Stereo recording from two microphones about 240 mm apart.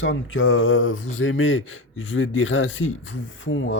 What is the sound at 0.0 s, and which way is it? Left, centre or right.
Speech, left.